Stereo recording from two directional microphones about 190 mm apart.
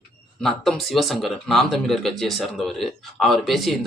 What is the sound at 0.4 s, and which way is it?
A man's voice, centre (ahead or behind).